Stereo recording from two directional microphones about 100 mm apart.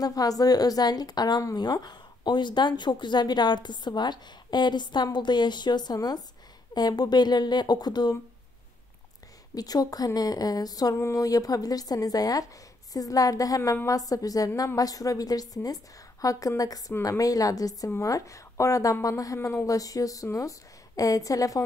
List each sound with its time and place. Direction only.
0.0 s a woman's voice: 40° left (ahead or behind)
9.6 s speech: 40° left (ahead or behind)